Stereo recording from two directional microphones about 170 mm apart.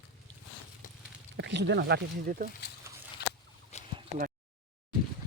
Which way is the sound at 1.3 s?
90° right.